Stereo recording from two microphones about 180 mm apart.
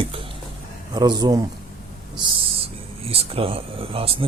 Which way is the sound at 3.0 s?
35° right (ahead or behind).